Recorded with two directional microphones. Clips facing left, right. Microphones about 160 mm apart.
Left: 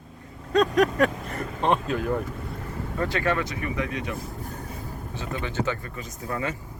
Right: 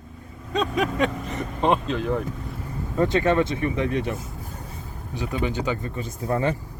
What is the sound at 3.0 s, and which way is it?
Speech, 20° right (ahead or behind).